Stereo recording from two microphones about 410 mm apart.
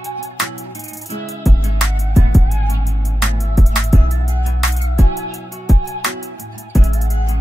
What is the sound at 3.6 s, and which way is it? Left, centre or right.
Music, centre.